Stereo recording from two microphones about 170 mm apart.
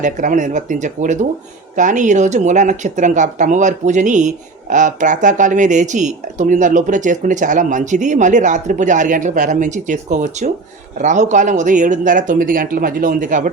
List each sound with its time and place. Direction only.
0.0 s speech: 50° right (ahead or behind)